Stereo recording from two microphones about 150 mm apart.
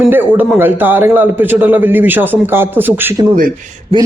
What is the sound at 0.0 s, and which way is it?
A man's voice, 15° right (ahead or behind).